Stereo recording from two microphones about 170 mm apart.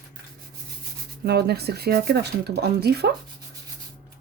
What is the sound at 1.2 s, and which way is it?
A woman's voice, 75° right (ahead or behind).